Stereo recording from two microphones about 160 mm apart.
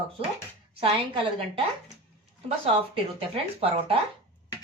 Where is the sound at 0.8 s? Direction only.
35° right (ahead or behind).